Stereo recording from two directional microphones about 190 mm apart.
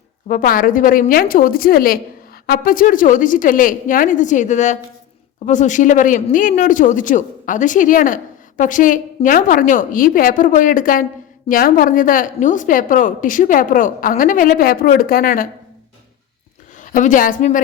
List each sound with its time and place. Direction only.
0.3 s speech: 45° left (ahead or behind)
16.8 s speech: 45° left (ahead or behind)